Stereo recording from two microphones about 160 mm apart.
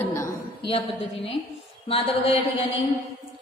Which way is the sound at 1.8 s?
35° left (ahead or behind).